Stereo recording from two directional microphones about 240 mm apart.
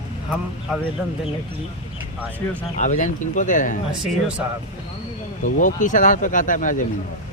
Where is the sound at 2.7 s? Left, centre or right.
Left.